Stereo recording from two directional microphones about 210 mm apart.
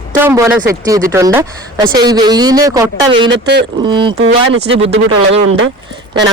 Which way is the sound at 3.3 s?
50° right (ahead or behind).